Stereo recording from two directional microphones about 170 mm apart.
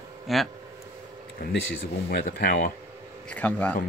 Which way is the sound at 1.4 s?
55° left (ahead or behind).